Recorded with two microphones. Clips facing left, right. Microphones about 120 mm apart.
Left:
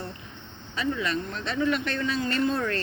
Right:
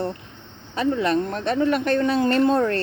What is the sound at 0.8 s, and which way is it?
Speech, 50° right (ahead or behind).